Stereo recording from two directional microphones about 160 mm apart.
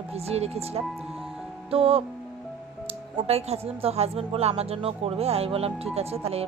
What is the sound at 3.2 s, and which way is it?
Speech, 40° right (ahead or behind).